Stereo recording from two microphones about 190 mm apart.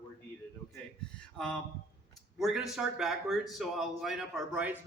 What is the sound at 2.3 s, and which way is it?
Speech, centre (ahead or behind).